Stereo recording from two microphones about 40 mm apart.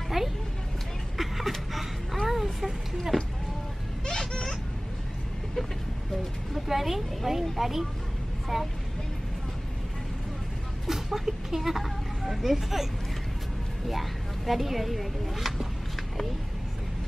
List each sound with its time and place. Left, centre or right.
0.2 s music: centre
1.1 s a sound: centre
4.0 s a sound: centre
6.5 s speech: centre
10.9 s speech: centre
13.8 s speech: centre